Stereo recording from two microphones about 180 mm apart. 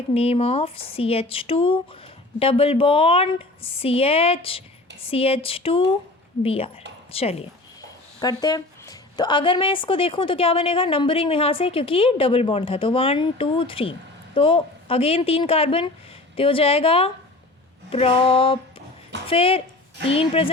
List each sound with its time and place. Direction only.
0.1 s a woman's voice: 35° left (ahead or behind)
8.2 s a woman's voice: 20° left (ahead or behind)